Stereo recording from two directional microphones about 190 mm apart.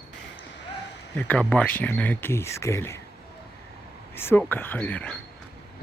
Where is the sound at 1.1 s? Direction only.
10° left (ahead or behind).